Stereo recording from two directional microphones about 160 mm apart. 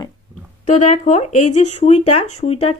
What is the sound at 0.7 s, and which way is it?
Speech, 45° left (ahead or behind).